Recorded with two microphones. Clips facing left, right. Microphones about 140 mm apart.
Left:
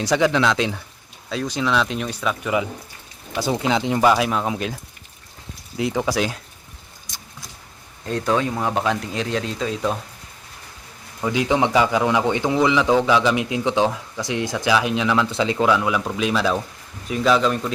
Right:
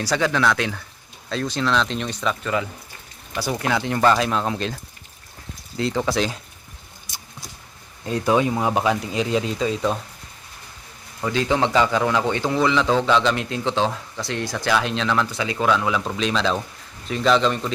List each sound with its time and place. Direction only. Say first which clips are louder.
0.0 s a man's voice: left 2 dB; 20° left (ahead or behind)
8.0 s speech: right 2 dB; 5° right (ahead or behind)
11.2 s a man's voice: left 1 dB; 15° left (ahead or behind)